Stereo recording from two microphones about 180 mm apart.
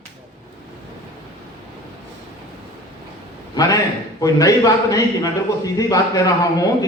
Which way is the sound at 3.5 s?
20° left (ahead or behind).